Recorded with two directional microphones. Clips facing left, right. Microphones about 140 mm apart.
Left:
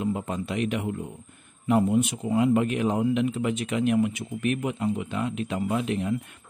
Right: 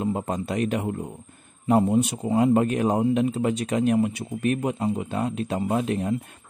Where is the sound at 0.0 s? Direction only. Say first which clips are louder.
Right 2 dB; 35° right (ahead or behind).